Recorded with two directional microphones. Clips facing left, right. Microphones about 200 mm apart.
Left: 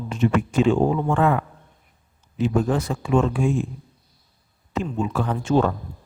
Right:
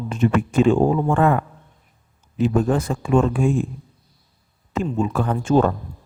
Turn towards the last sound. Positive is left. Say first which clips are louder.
# right 3 dB
turn(degrees=-50)  # may be behind; listen again after turning